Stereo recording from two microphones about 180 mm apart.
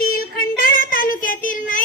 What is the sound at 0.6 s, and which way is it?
Child singing, 50° left (ahead or behind).